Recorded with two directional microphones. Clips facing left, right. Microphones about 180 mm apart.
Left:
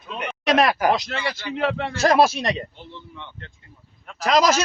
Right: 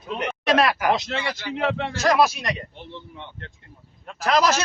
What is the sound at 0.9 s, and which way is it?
Speech, 25° right (ahead or behind).